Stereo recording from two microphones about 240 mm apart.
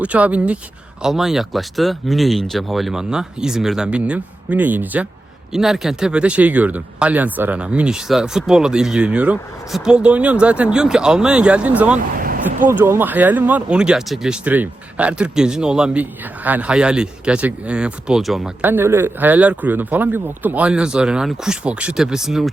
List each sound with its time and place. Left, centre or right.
0.0 s speech: centre
12.2 s a sound: right
12.6 s speech: centre